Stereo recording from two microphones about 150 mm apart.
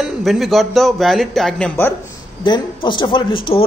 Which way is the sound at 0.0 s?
Centre (ahead or behind).